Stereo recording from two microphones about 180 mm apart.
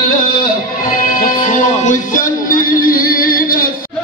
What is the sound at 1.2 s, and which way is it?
Music, 45° left (ahead or behind).